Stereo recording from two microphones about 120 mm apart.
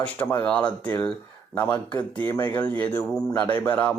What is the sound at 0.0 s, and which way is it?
Speech, 15° left (ahead or behind).